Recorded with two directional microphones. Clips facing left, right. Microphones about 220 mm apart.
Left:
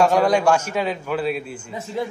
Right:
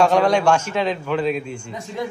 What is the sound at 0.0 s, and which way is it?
A man's voice, 10° left (ahead or behind).